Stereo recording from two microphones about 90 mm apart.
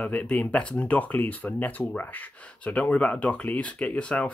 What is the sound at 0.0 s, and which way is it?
Speech, 15° left (ahead or behind).